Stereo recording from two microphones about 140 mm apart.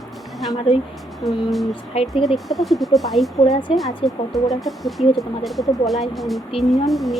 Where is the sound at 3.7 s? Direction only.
40° left (ahead or behind).